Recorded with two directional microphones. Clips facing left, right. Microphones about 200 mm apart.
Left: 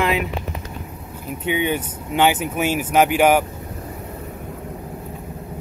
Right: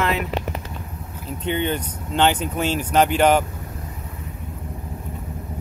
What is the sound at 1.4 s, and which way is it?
Speech, 10° left (ahead or behind).